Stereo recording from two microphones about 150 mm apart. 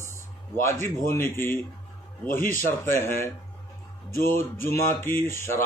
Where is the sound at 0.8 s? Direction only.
15° left (ahead or behind).